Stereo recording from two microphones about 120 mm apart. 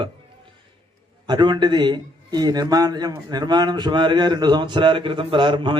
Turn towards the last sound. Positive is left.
turn(degrees=-40)  # may be behind; listen again after turning